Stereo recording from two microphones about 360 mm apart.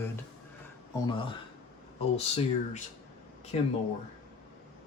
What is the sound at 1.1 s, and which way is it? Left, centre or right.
Speech, centre.